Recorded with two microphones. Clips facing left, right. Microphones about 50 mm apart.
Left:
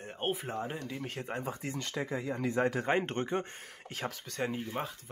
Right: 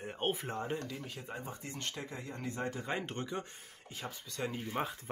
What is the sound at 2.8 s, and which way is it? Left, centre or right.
Speech, left.